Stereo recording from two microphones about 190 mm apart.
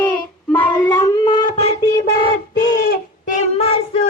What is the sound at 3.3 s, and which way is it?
Child singing, 35° left (ahead or behind).